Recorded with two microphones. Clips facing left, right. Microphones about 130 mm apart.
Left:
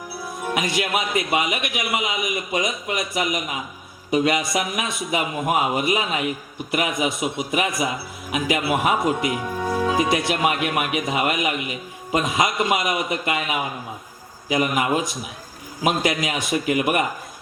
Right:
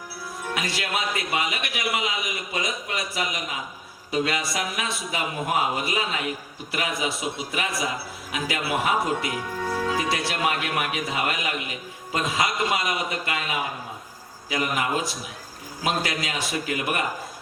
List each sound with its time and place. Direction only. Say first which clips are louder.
0.4 s a man's voice: left 6 dB; 20° left (ahead or behind)